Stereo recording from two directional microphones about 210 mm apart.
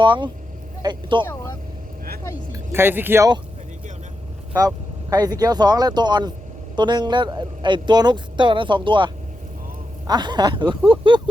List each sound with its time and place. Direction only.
0.0 s a man's voice: 20° right (ahead or behind)
2.5 s speech: 10° right (ahead or behind)
4.5 s a man's voice: 15° right (ahead or behind)